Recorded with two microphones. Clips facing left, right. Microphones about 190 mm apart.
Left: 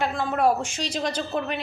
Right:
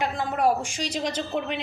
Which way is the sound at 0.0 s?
15° right (ahead or behind).